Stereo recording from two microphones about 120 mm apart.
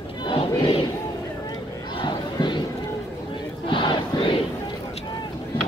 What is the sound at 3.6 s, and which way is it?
Crowd, 45° left (ahead or behind).